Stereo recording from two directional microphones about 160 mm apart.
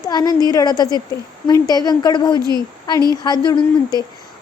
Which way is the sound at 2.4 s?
25° right (ahead or behind).